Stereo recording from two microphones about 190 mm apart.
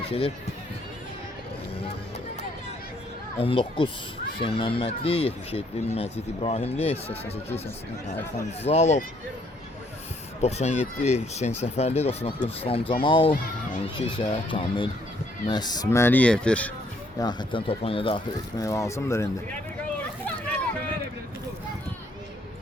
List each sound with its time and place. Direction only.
0.0 s speech: 30° left (ahead or behind)
3.3 s speech: 30° left (ahead or behind)
8.6 s speech: 35° left (ahead or behind)
10.4 s speech: 35° left (ahead or behind); by 16.7 s 5° left (ahead or behind)
17.2 s speech: 20° left (ahead or behind)
18.6 s speech: 15° left (ahead or behind)